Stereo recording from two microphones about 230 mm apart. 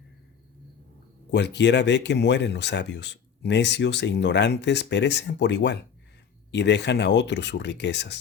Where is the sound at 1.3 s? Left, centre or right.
Left.